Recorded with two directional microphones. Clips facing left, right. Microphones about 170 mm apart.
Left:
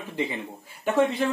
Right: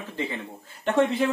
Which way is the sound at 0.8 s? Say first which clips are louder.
Right 1 dB; centre (ahead or behind).